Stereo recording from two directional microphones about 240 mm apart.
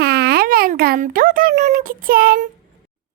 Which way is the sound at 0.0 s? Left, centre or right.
Right.